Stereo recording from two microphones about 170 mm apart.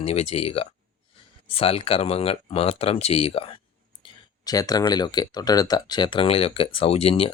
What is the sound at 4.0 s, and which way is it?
Speech, 20° left (ahead or behind).